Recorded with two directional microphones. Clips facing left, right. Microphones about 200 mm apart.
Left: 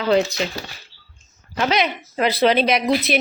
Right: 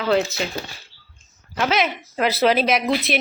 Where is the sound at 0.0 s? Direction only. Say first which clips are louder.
Left 2 dB; centre (ahead or behind).